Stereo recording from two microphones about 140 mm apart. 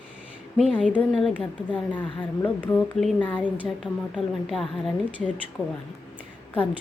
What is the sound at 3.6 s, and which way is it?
A woman's voice, centre (ahead or behind).